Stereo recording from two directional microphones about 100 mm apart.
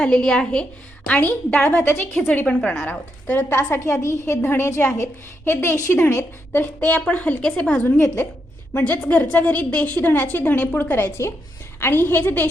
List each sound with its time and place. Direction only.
0.0 s a woman's voice: 5° left (ahead or behind)
7.9 s a woman's voice: 20° left (ahead or behind)